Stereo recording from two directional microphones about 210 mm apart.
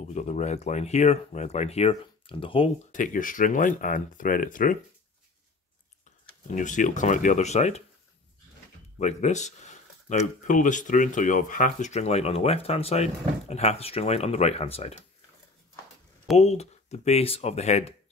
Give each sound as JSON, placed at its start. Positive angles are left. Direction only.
{"t": 0.0, "sound": "speech", "side_deg": 30}
{"t": 2.9, "sound": "speech", "side_deg": 40}
{"t": 6.5, "sound": "speech", "side_deg": 35}
{"t": 8.9, "sound": "speech", "side_deg": 35}
{"t": 16.3, "sound": "speech", "side_deg": 30}